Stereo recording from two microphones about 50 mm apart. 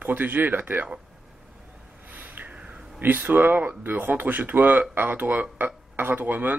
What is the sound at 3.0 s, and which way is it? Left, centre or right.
Speech, right.